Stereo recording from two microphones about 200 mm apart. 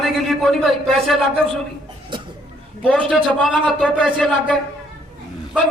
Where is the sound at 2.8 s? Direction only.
5° left (ahead or behind).